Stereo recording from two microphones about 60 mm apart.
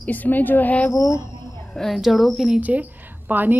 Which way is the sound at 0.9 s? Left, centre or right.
Left.